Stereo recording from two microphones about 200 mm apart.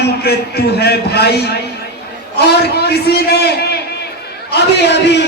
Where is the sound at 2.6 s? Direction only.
55° left (ahead or behind).